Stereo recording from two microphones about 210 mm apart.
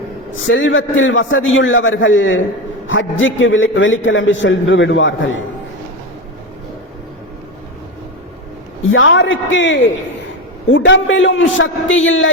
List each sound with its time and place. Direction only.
0.3 s a man's voice: 65° left (ahead or behind)
8.9 s a man's voice: 65° left (ahead or behind)